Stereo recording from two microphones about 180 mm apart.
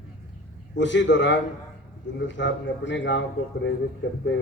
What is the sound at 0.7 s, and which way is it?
A man's voice, 90° left.